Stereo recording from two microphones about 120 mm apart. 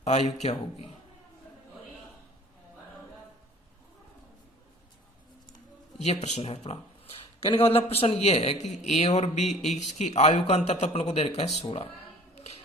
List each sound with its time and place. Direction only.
0.0 s a man's voice: 65° left (ahead or behind)
6.0 s a man's voice: 70° left (ahead or behind)